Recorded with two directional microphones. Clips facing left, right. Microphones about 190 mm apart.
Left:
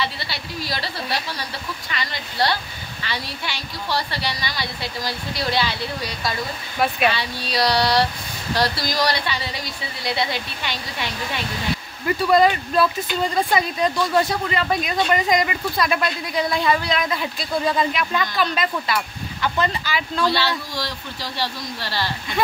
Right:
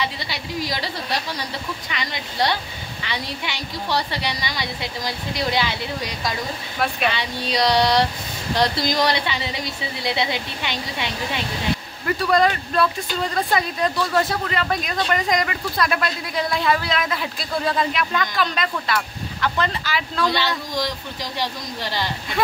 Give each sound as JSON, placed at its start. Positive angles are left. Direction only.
{"t": 0.0, "sound": "speech", "side_deg": -15}
{"t": 1.9, "sound": "a woman's voice", "side_deg": -20}
{"t": 12.2, "sound": "speech", "side_deg": 5}
{"t": 20.2, "sound": "speech", "side_deg": -15}